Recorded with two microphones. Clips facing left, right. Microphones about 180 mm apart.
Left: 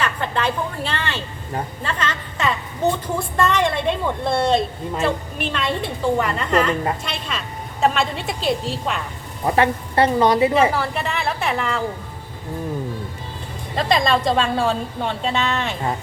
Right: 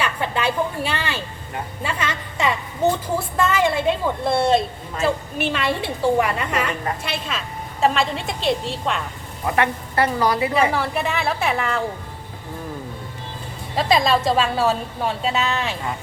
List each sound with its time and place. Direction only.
0.0 s a woman's voice: 10° right (ahead or behind)
9.5 s a woman's voice: 30° left (ahead or behind)
10.7 s a woman's voice: centre (ahead or behind)
13.7 s a woman's voice: 5° right (ahead or behind)